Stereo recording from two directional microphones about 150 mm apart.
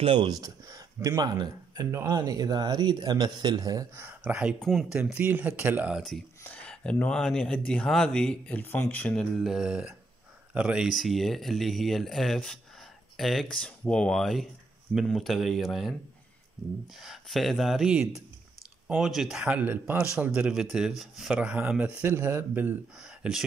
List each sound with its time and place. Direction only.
0.0 s speech: 35° right (ahead or behind)
0.4 s speech: 25° right (ahead or behind); by 6.2 s centre (ahead or behind)
6.4 s speech: 10° left (ahead or behind)
17.0 s speech: centre (ahead or behind)